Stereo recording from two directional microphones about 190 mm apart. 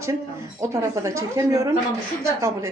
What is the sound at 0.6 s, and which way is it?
A woman's voice, 15° right (ahead or behind).